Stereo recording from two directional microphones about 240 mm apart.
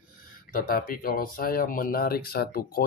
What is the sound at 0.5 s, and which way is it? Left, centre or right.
Speech, left.